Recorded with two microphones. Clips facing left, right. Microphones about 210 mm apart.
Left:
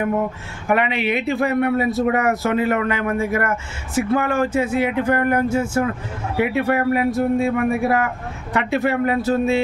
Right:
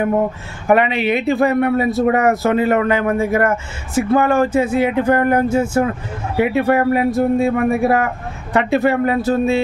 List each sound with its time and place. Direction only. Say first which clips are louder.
0.7 s speech: right 5 dB; 35° right (ahead or behind)